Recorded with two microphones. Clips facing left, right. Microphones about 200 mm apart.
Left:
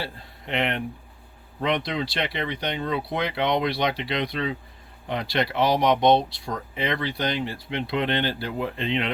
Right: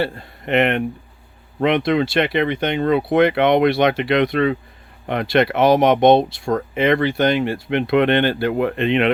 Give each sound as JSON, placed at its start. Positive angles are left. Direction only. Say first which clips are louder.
{"t": 0.0, "sound": "speech", "louder": "right 11 dB", "side_deg": -65}
{"t": 1.6, "sound": "speech", "louder": "right 9 dB", "side_deg": -55}